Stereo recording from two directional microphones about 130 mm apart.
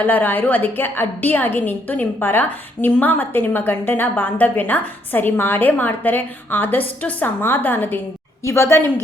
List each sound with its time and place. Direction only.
0.0 s a woman's voice: 15° left (ahead or behind)